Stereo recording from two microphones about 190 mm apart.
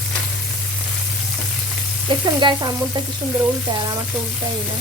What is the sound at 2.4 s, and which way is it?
Frying, 25° right (ahead or behind).